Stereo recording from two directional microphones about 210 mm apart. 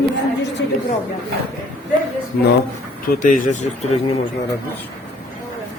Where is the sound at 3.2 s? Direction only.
40° left (ahead or behind).